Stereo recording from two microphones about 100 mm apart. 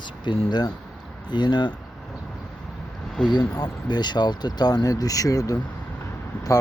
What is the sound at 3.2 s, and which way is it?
Speech, 45° left (ahead or behind).